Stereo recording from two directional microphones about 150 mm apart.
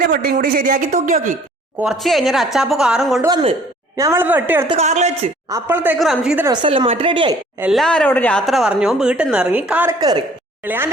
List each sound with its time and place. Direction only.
0.0 s speech: 90° right; by 1.4 s 55° right (ahead or behind)
1.8 s speech: centre (ahead or behind)
3.2 s a woman's voice: 25° right (ahead or behind)
4.8 s a woman's voice: 50° right (ahead or behind)
5.5 s a woman's voice: 15° right (ahead or behind)
6.5 s speech: 35° right (ahead or behind)
7.6 s speech: centre (ahead or behind)
10.0 s a woman's voice: 25° right (ahead or behind)
10.6 s a woman's voice: 10° right (ahead or behind)